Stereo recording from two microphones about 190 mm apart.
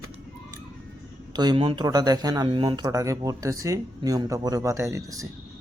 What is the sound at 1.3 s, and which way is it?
Speech, 20° right (ahead or behind).